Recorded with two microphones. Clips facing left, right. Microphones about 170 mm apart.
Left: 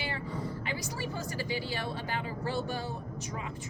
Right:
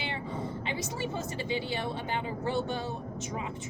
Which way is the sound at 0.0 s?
25° right (ahead or behind).